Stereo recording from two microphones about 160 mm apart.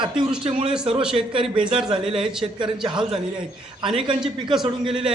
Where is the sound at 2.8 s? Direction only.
30° right (ahead or behind).